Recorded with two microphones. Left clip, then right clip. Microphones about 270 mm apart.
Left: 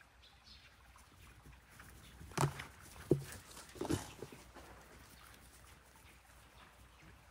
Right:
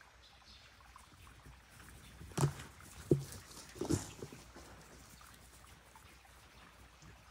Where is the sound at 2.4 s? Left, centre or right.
Centre.